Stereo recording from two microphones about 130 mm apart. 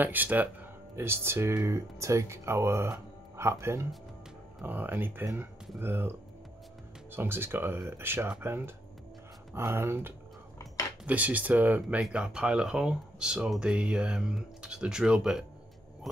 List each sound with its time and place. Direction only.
0.0 s speech: 15° right (ahead or behind)